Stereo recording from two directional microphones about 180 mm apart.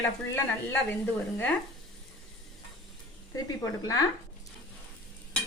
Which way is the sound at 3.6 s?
20° left (ahead or behind).